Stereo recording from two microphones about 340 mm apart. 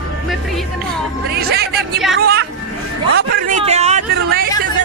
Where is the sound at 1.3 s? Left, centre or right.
Right.